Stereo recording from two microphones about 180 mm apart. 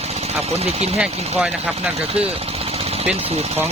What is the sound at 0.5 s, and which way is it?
Speech, 35° right (ahead or behind).